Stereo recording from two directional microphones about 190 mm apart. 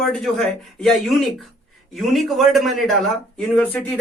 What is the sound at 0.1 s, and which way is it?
Speech, 5° left (ahead or behind).